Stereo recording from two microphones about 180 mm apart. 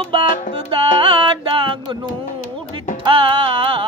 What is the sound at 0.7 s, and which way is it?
Music, 30° right (ahead or behind).